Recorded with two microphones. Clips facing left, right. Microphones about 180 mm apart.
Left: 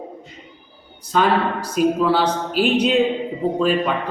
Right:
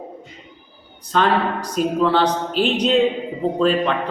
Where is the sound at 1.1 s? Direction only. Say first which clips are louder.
Even; 10° left (ahead or behind).